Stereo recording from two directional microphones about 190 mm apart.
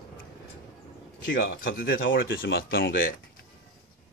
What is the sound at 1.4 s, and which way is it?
Speech, 50° left (ahead or behind).